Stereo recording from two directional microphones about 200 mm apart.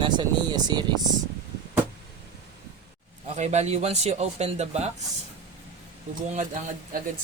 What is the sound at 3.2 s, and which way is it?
Speech, 35° right (ahead or behind).